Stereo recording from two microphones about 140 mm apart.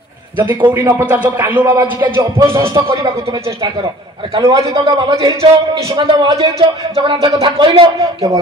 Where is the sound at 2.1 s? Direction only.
20° right (ahead or behind).